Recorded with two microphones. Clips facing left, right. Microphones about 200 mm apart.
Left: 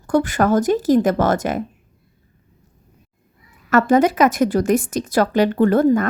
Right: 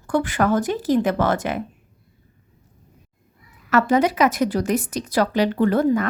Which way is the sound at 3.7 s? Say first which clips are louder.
Left 3 dB; 45° left (ahead or behind).